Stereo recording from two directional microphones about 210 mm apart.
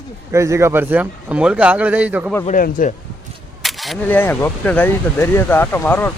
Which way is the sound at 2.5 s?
40° left (ahead or behind).